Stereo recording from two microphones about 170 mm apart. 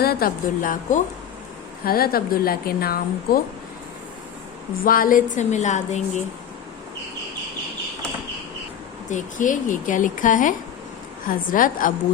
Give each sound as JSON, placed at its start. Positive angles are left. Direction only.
{"t": 0.0, "sound": "a woman's voice", "side_deg": 60}
{"t": 4.9, "sound": "a woman's voice", "side_deg": 55}
{"t": 9.0, "sound": "a woman's voice", "side_deg": 50}